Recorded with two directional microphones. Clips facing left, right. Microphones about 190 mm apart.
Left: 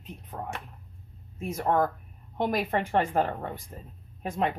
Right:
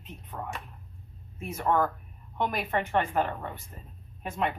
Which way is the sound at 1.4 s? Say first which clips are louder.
Left 1 dB; 35° left (ahead or behind).